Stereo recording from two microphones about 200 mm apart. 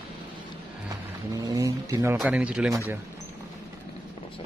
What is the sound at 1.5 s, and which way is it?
Speech, 15° right (ahead or behind).